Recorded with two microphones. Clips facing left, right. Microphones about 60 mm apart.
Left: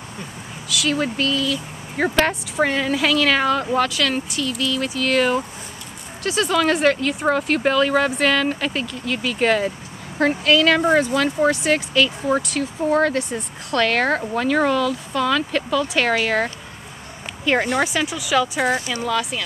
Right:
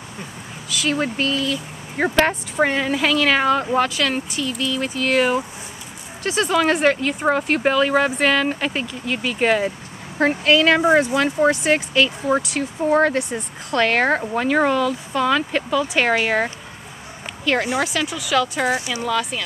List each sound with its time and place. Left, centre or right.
0.8 s speech: right
2.0 s speech: centre
6.2 s speech: right
10.8 s speech: centre
17.5 s speech: centre
18.8 s speech: centre
19.0 s speech: centre